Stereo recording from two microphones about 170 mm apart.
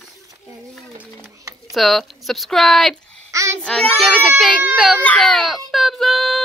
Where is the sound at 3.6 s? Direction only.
5° left (ahead or behind).